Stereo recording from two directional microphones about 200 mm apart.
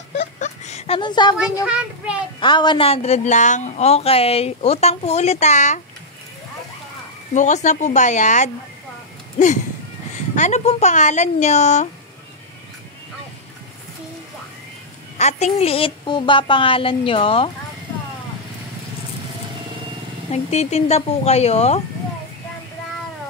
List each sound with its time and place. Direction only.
0.4 s a sound: 35° left (ahead or behind)
1.7 s a child's voice: 5° right (ahead or behind)
2.4 s a woman's voice: 25° left (ahead or behind)
7.3 s a woman's voice: 35° left (ahead or behind)
15.1 s a woman's voice: 35° left (ahead or behind)
20.2 s a woman's voice: 30° left (ahead or behind)